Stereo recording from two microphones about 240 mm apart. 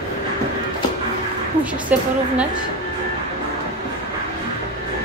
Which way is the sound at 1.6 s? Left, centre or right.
Centre.